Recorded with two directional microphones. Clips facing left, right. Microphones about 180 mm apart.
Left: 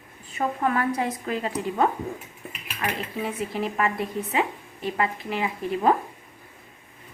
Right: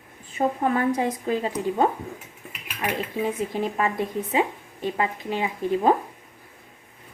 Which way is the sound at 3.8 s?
20° right (ahead or behind).